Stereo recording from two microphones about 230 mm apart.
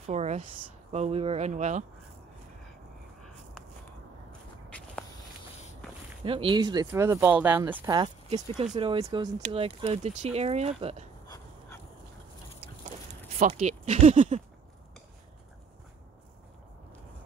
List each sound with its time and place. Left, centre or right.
0.0 s a sound: right
0.9 s speech: right
4.6 s walk: centre
6.2 s speech: right
11.2 s dog: centre
12.5 s a sound: right